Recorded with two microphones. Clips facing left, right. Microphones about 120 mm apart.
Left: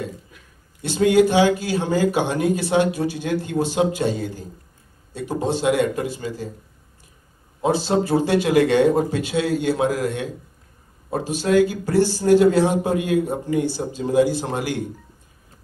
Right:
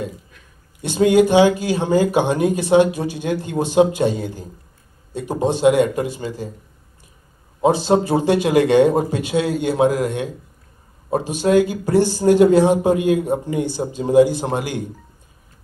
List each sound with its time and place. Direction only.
0.8 s a man's voice: 20° right (ahead or behind)
7.6 s a man's voice: 15° right (ahead or behind)